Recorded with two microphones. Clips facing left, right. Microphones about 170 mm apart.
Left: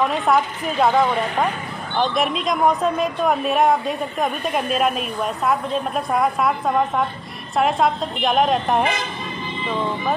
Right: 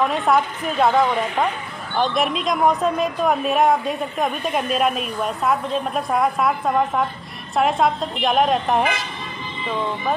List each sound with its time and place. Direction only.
0.0 s a woman's voice: centre (ahead or behind)